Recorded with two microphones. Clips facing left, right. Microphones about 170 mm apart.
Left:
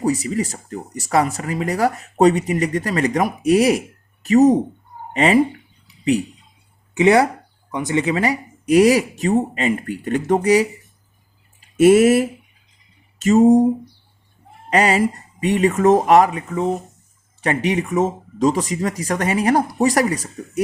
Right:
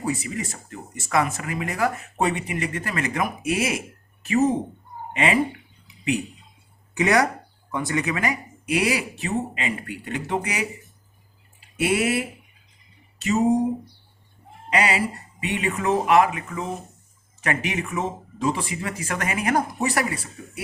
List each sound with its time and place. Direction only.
0.0 s speech: 40° left (ahead or behind)
6.9 s speech: 25° left (ahead or behind)
11.8 s speech: 45° left (ahead or behind)
14.7 s speech: 45° left (ahead or behind)